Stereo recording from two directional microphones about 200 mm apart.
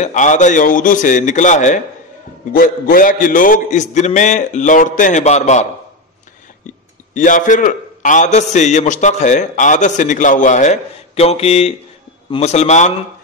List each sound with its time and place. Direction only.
0.0 s a man's voice: 40° left (ahead or behind)
7.2 s a man's voice: 40° left (ahead or behind)